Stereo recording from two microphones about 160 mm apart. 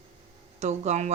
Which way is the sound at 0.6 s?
45° right (ahead or behind).